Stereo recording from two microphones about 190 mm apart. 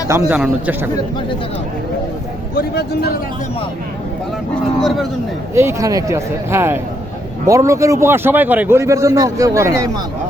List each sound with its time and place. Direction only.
0.3 s a man's voice: 5° right (ahead or behind)
2.6 s speech: 55° left (ahead or behind)
4.8 s a man's voice: centre (ahead or behind)
5.5 s a man's voice: 15° right (ahead or behind)